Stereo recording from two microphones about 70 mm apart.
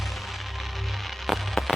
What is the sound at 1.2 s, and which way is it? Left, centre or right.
Fireworks, centre.